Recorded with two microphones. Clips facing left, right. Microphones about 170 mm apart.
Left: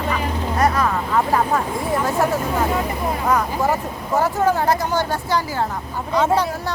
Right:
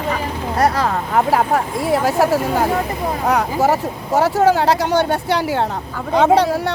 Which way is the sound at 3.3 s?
75° right (ahead or behind).